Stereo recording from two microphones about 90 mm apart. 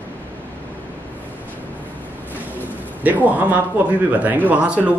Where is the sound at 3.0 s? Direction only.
20° right (ahead or behind).